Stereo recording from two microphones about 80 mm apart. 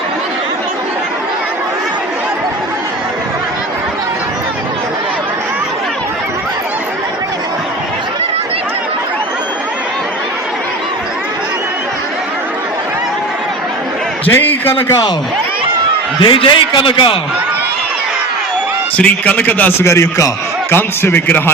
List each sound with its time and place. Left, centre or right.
14.3 s a man's voice: left
16.2 s a man's voice: left
18.9 s speech: centre
19.8 s a man's voice: left
20.7 s speech: left